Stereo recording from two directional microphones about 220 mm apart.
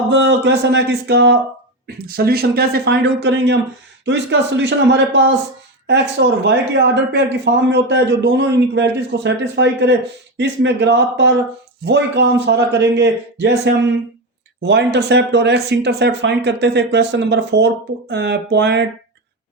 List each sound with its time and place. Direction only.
0.1 s speech: 55° right (ahead or behind)
14.6 s speech: 50° right (ahead or behind)